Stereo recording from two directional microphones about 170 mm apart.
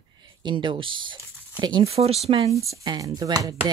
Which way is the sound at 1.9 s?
35° right (ahead or behind).